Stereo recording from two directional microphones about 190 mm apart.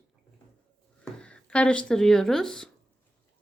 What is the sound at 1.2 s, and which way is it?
Speech, 5° left (ahead or behind).